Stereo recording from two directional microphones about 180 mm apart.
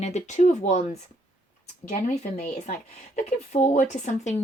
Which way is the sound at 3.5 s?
40° left (ahead or behind).